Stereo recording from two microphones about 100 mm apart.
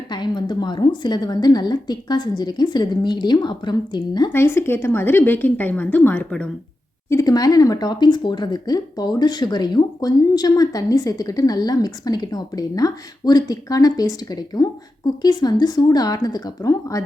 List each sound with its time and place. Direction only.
0.1 s a woman's voice: 50° left (ahead or behind)
4.3 s a woman's voice: 25° left (ahead or behind)
7.1 s speech: 35° left (ahead or behind)